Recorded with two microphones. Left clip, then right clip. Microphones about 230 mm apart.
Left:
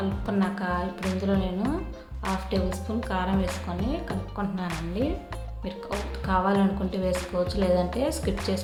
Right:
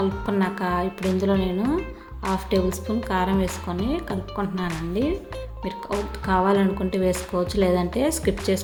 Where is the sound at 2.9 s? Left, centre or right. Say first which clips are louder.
Right 4 dB; right.